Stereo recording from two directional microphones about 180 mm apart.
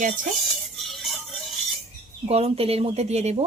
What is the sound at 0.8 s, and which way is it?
Music, centre (ahead or behind).